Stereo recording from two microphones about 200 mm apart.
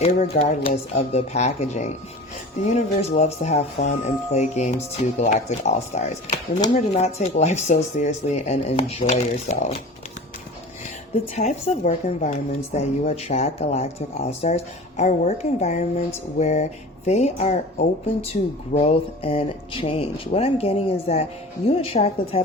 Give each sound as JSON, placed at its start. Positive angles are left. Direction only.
{"t": 0.0, "sound": "speech", "side_deg": 35}
{"t": 11.1, "sound": "a woman's voice", "side_deg": 35}